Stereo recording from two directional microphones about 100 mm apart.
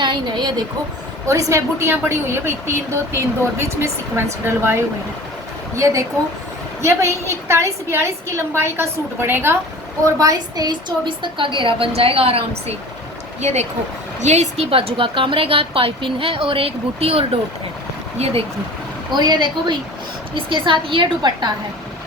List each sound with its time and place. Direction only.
0.0 s speech: 50° right (ahead or behind)
1.3 s a woman's voice: 30° right (ahead or behind)
10.0 s a woman's voice: 35° right (ahead or behind); by 12.7 s 75° right (ahead or behind)
14.3 s a woman's voice: 90° right; by 17.2 s 75° right (ahead or behind)
18.2 s speech: 90° right
19.1 s a woman's voice: 45° right (ahead or behind)